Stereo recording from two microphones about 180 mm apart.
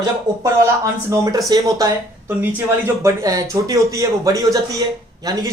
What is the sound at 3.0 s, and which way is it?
A man's voice, 20° right (ahead or behind).